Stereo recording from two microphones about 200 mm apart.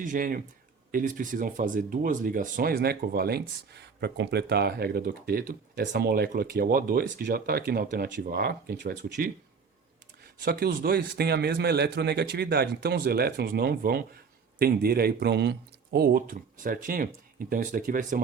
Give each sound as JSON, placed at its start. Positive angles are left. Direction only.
{"t": 0.0, "sound": "speech", "side_deg": -45}
{"t": 10.4, "sound": "speech", "side_deg": -50}